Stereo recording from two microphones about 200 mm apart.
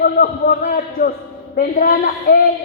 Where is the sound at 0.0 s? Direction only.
45° left (ahead or behind).